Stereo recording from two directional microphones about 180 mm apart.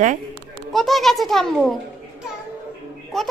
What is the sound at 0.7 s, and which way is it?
A child's voice, centre (ahead or behind).